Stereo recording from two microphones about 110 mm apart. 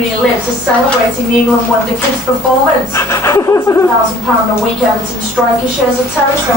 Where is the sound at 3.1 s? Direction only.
30° left (ahead or behind).